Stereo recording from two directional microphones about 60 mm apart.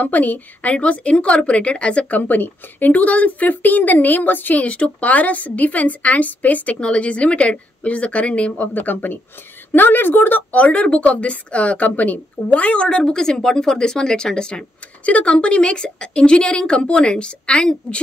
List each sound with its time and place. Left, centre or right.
0.0 s a woman's voice: left
8.7 s speech: left; by 18.0 s centre